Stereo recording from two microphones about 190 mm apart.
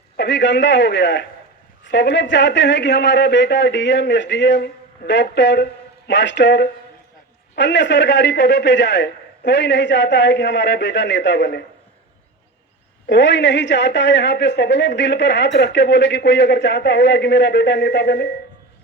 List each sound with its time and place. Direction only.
0.2 s a woman's voice: 65° left (ahead or behind)
13.1 s a woman's voice: 65° left (ahead or behind)